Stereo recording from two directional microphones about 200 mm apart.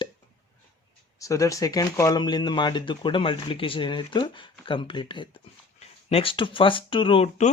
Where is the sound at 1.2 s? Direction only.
15° left (ahead or behind).